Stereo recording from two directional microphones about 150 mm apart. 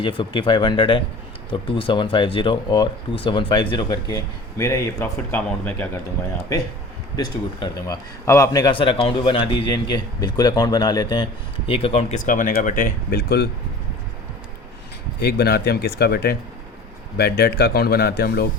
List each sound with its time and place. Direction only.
0.0 s speech: 30° left (ahead or behind)
4.1 s speech: 20° left (ahead or behind)
7.2 s speech: 25° left (ahead or behind)
11.7 s speech: 40° left (ahead or behind)
12.2 s speech: 60° left (ahead or behind); by 13.5 s 90° left
15.2 s speech: 90° left